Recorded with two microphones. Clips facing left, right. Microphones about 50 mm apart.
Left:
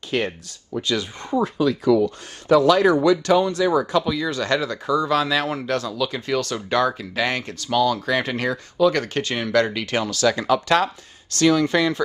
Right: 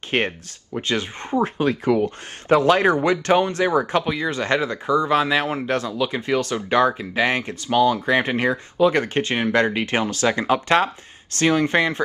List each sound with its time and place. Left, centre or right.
0.1 s speech: right